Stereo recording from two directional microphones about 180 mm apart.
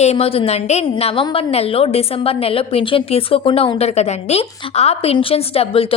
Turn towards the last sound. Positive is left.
turn(degrees=30)  # may be behind; listen again after turning